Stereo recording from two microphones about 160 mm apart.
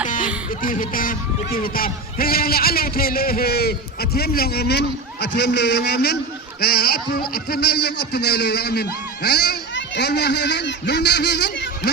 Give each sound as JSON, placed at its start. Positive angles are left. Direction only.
{"t": 0.6, "sound": "a man's voice", "side_deg": 60}